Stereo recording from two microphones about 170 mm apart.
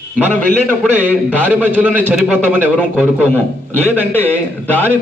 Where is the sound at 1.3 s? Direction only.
10° left (ahead or behind).